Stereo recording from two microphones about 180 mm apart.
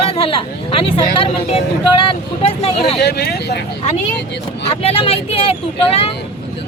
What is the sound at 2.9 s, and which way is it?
Speech, 65° left (ahead or behind).